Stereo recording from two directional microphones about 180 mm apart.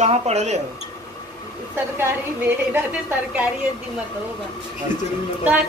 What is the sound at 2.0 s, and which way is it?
Speech, 15° right (ahead or behind).